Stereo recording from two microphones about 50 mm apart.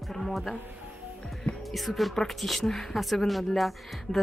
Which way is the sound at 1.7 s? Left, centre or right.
Centre.